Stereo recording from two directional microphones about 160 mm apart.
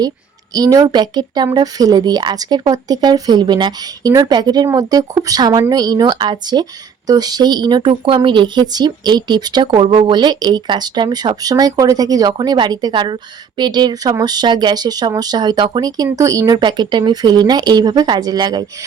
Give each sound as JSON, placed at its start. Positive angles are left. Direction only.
{"t": 0.5, "sound": "speech", "side_deg": -25}